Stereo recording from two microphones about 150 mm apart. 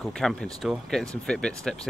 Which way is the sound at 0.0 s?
Centre (ahead or behind).